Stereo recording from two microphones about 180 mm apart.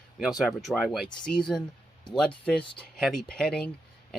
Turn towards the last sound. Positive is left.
turn(degrees=5)  # may be behind; listen again after turning